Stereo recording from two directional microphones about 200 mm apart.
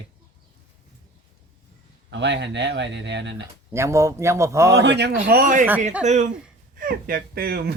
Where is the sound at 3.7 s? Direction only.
15° right (ahead or behind).